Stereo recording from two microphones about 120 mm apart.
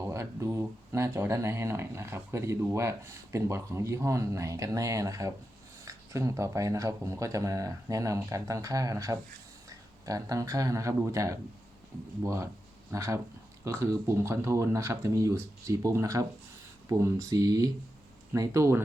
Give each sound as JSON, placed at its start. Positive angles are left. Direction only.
{"t": 0.0, "sound": "speech", "side_deg": -25}